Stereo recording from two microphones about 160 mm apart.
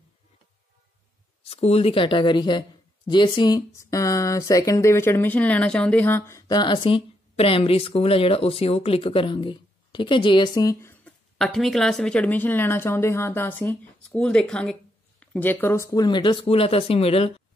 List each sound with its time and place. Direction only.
1.5 s speech: 35° left (ahead or behind); by 11.1 s 15° left (ahead or behind)
11.3 s speech: centre (ahead or behind); by 17.3 s 35° left (ahead or behind)